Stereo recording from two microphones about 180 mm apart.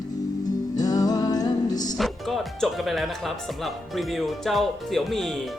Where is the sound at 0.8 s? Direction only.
20° left (ahead or behind).